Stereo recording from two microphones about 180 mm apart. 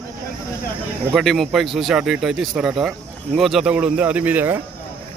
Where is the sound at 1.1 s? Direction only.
Centre (ahead or behind).